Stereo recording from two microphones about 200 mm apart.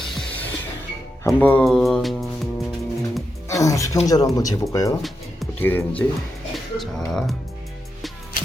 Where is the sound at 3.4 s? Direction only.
15° left (ahead or behind).